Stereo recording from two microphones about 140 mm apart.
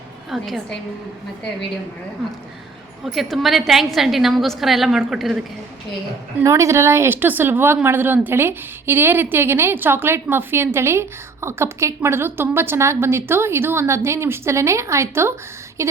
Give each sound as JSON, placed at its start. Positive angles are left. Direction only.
{"t": 0.3, "sound": "a woman's voice", "side_deg": 0}
{"t": 3.0, "sound": "a woman's voice", "side_deg": 0}
{"t": 6.4, "sound": "speech", "side_deg": -20}
{"t": 15.8, "sound": "a sound", "side_deg": -20}